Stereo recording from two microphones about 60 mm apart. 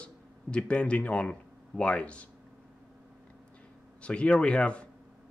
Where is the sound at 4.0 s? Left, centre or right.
Centre.